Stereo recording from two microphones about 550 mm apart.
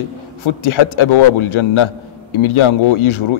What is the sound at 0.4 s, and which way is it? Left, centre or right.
Speech, left.